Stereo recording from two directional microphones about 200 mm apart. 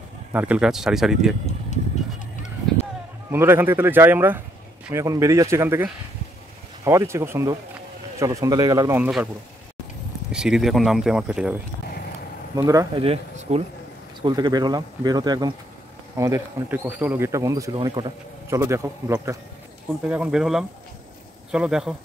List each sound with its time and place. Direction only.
0.3 s speech: 10° right (ahead or behind)
3.3 s speech: 10° right (ahead or behind)
10.3 s speech: 5° right (ahead or behind)
12.5 s speech: 15° right (ahead or behind)
13.0 s speech: 30° right (ahead or behind); by 21.9 s 5° right (ahead or behind)